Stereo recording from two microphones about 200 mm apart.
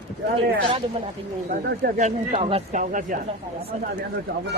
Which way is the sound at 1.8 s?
35° right (ahead or behind).